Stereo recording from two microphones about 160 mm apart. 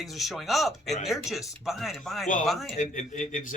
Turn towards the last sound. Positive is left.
turn(degrees=55)  # may be behind; listen again after turning